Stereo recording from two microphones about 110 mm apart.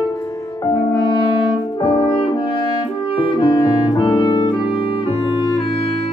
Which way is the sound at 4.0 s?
50° left (ahead or behind).